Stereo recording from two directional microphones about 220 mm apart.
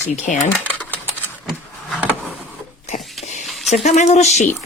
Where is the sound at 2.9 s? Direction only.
30° left (ahead or behind).